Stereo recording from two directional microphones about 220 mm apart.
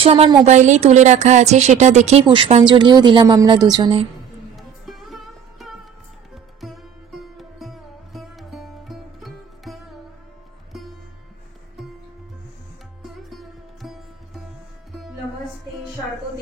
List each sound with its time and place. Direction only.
0.0 s speech: 25° right (ahead or behind)
4.6 s music: centre (ahead or behind)
13.0 s music: centre (ahead or behind)